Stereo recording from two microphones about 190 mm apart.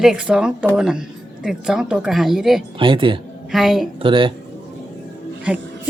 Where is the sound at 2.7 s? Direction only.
25° right (ahead or behind).